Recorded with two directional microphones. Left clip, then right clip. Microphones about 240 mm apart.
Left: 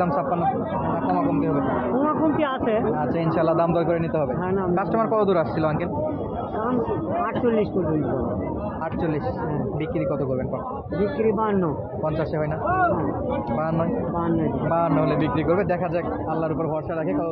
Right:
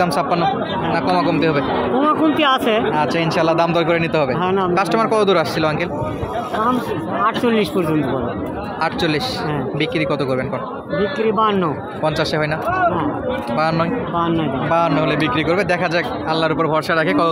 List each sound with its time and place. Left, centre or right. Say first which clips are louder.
2.0 s speech: right 9 dB; right
3.0 s speech: right 6 dB; centre
4.4 s speech: right 7 dB; right
4.7 s speech: right 4 dB; centre
7.2 s speech: right 7 dB; right
11.0 s speech: right 5 dB; right
12.0 s speech: right 7 dB; centre
13.6 s speech: right 9 dB; centre